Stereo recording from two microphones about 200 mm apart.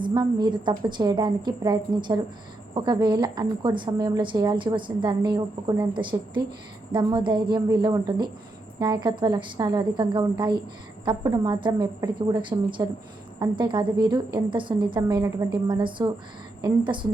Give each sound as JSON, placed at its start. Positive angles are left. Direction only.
{"t": 0.0, "sound": "a woman's voice", "side_deg": -20}